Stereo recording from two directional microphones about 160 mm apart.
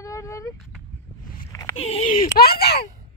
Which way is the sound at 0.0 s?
20° left (ahead or behind).